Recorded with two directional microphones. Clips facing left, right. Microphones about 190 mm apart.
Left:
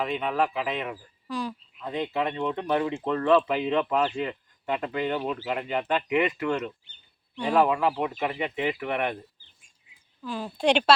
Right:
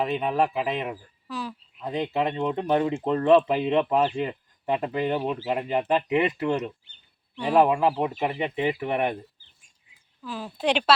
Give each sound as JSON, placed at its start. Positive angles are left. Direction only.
{"t": 0.0, "sound": "speech", "side_deg": -35}
{"t": 1.3, "sound": "a woman's voice", "side_deg": -5}
{"t": 1.8, "sound": "speech", "side_deg": -30}
{"t": 3.5, "sound": "speech", "side_deg": -35}
{"t": 5.1, "sound": "speech", "side_deg": -15}
{"t": 5.6, "sound": "speech", "side_deg": -35}
{"t": 6.4, "sound": "speech", "side_deg": -15}
{"t": 7.3, "sound": "speech", "side_deg": -5}
{"t": 7.6, "sound": "speech", "side_deg": -25}
{"t": 10.2, "sound": "a woman's voice", "side_deg": -5}